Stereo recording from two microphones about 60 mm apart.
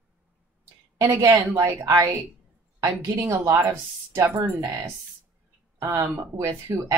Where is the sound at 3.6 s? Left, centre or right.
Right.